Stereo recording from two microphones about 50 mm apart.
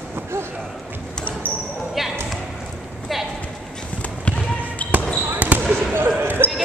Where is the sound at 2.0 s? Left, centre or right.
Centre.